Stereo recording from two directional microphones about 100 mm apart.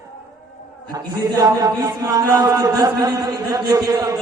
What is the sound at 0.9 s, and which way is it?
A man's voice, 35° right (ahead or behind).